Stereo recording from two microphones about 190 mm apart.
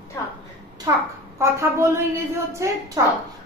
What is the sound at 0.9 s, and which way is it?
A woman's voice, 20° right (ahead or behind).